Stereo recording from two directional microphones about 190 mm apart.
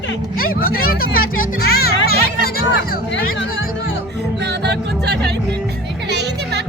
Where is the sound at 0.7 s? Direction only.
50° left (ahead or behind).